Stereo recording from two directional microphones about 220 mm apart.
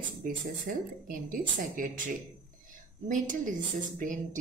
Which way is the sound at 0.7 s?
40° right (ahead or behind).